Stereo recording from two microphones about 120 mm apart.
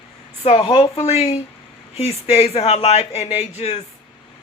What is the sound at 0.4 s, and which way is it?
A man's voice, 55° left (ahead or behind).